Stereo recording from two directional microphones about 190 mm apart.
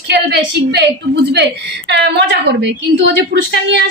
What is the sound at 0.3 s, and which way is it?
A woman's voice, 60° right (ahead or behind).